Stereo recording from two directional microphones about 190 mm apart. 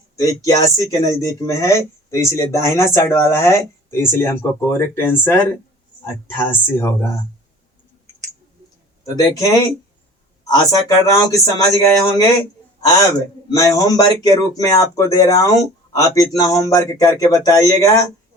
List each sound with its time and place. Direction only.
0.2 s speech: 20° left (ahead or behind)
9.1 s speech: 20° left (ahead or behind)
13.5 s speech: 20° left (ahead or behind)